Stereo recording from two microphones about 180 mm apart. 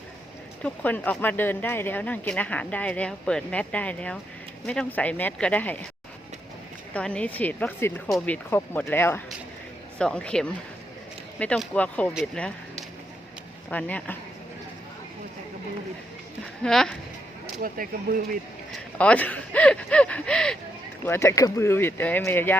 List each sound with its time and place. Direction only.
0.6 s speech: 10° left (ahead or behind)
6.9 s speech: 5° left (ahead or behind)
13.7 s speech: 10° left (ahead or behind)
16.6 s speech: 5° left (ahead or behind)
17.6 s speech: 50° right (ahead or behind)
18.9 s speech: 10° left (ahead or behind)
21.0 s speech: 15° left (ahead or behind)